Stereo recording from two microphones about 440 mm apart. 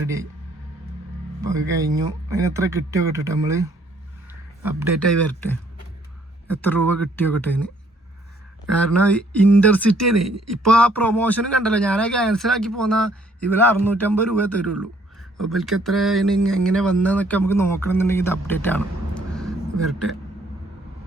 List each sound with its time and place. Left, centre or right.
1.4 s speech: centre
6.5 s speech: centre
8.8 s speech: centre
10.0 s speech: right
10.8 s speech: centre
19.3 s a sound: centre